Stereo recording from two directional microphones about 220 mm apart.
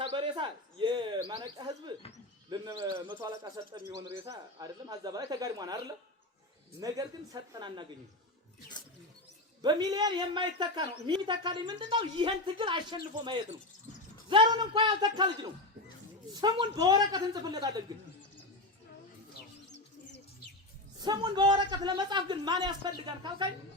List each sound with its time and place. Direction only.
0.0 s speech: 20° right (ahead or behind)
9.6 s speech: 20° right (ahead or behind)
19.7 s bird: 55° left (ahead or behind)
21.0 s speech: 20° right (ahead or behind)